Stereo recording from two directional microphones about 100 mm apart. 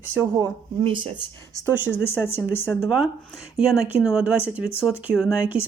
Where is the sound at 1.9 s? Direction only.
25° left (ahead or behind).